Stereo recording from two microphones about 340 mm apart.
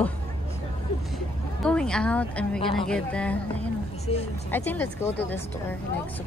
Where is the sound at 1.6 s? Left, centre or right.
Centre.